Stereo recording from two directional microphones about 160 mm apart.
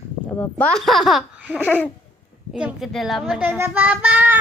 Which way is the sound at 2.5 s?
5° right (ahead or behind).